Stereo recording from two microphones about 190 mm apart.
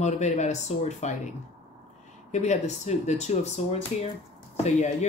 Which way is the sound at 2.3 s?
40° left (ahead or behind).